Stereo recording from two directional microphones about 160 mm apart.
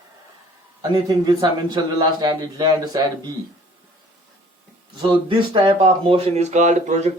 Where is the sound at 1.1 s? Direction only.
25° right (ahead or behind).